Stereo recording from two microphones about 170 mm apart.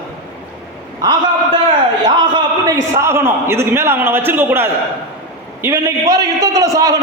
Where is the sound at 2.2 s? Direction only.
25° right (ahead or behind).